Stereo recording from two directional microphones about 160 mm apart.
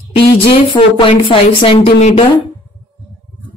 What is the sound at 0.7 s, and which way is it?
Speech, 30° left (ahead or behind).